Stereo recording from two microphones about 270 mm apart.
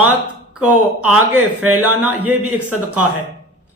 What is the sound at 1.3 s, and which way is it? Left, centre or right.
Speech, right.